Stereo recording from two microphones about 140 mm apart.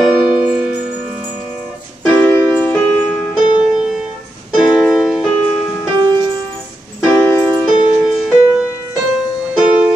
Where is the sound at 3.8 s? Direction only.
5° right (ahead or behind).